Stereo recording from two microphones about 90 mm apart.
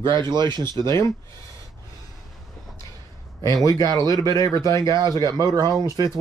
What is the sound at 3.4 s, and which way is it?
Speech, 50° right (ahead or behind).